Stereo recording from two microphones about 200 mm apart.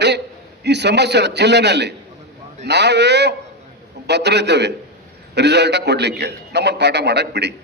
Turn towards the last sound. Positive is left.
turn(degrees=-60)  # may be behind; listen again after turning